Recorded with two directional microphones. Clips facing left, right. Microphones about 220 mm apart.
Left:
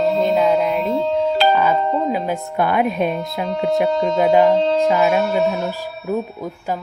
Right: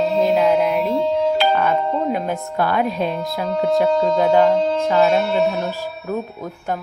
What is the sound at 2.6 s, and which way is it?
Speech, 20° left (ahead or behind).